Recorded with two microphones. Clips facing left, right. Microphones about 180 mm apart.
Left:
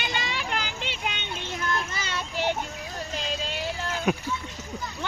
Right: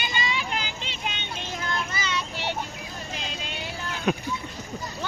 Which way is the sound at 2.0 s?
50° left (ahead or behind).